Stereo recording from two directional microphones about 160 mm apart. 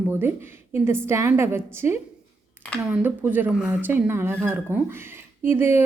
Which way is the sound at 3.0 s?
10° right (ahead or behind).